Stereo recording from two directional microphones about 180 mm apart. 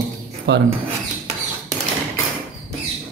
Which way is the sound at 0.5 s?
70° right (ahead or behind).